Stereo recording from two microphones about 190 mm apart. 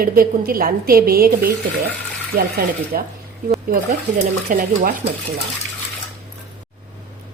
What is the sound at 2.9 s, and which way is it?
Speech, 50° right (ahead or behind).